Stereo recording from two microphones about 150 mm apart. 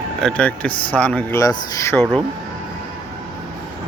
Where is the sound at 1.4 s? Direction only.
20° left (ahead or behind).